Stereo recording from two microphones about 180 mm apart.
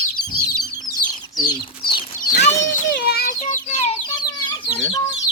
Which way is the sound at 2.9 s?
60° left (ahead or behind).